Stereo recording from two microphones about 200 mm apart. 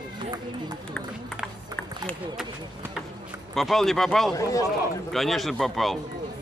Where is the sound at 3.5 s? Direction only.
Centre (ahead or behind).